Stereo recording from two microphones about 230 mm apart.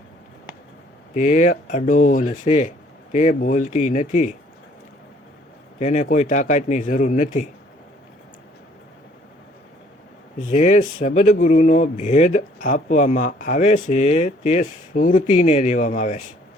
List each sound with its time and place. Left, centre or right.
1.1 s speech: left
5.8 s speech: left
10.5 s speech: left